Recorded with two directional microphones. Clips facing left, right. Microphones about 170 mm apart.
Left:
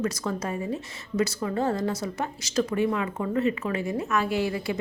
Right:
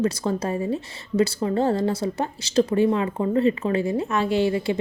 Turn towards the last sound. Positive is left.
turn(degrees=-25)  # may be behind; listen again after turning